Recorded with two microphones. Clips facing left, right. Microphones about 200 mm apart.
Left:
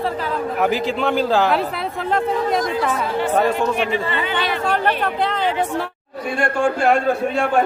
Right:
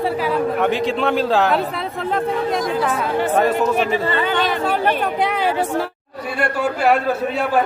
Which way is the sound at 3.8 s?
40° right (ahead or behind).